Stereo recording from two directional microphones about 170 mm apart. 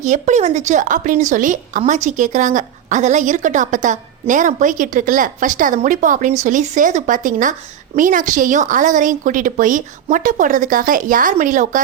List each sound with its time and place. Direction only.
0.0 s a woman's voice: 45° right (ahead or behind)